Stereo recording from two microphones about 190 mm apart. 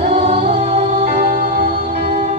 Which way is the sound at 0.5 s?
55° right (ahead or behind).